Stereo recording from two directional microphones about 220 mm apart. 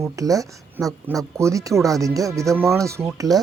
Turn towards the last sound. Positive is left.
turn(degrees=-15)  # may be behind; listen again after turning